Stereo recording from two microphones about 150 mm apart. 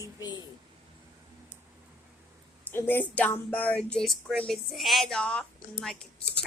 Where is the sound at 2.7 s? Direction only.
15° left (ahead or behind).